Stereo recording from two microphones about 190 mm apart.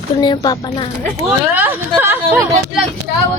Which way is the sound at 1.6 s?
10° right (ahead or behind).